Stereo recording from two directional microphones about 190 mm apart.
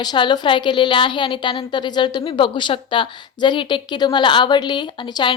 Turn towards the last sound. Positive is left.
turn(degrees=25)  # may be behind; listen again after turning